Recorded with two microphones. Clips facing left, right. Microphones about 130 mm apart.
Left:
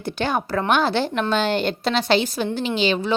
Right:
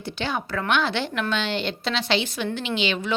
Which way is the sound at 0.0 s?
50° left (ahead or behind).